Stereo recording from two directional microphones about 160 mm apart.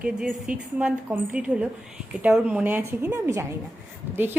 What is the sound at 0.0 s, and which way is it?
A woman's voice, 5° right (ahead or behind).